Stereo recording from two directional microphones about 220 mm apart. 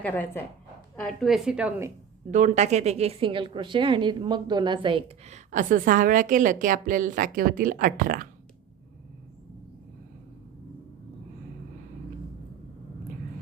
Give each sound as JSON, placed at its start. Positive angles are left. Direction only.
{"t": 0.0, "sound": "a woman's voice", "side_deg": 10}
{"t": 2.3, "sound": "a woman's voice", "side_deg": -35}